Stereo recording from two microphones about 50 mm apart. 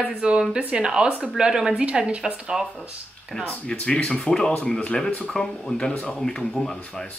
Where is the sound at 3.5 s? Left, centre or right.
Left.